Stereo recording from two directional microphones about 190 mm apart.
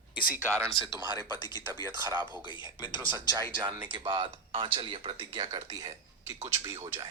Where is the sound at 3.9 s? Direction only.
25° right (ahead or behind).